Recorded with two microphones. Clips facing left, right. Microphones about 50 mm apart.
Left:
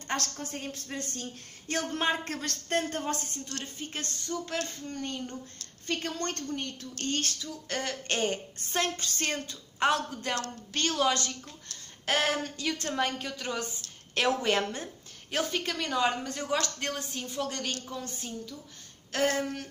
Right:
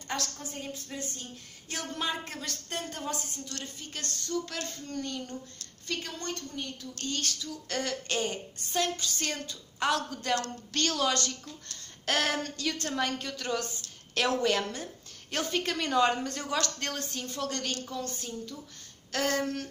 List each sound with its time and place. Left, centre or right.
0.1 s a woman's voice: left
1.7 s a woman's voice: left
3.5 s speech: left
5.9 s a woman's voice: left
15.3 s a woman's voice: centre
16.4 s speech: centre
19.1 s speech: left